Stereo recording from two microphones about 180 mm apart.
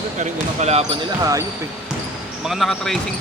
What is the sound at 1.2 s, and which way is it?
Speech, 20° right (ahead or behind).